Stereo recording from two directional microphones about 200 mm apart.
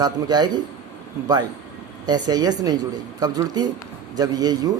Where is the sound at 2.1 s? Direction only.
20° right (ahead or behind).